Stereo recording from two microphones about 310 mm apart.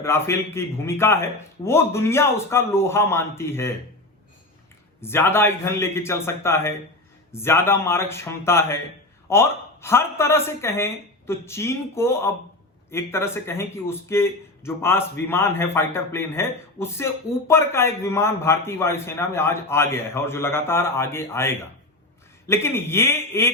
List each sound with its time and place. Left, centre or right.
0.0 s a man's voice: centre
4.9 s a man's voice: centre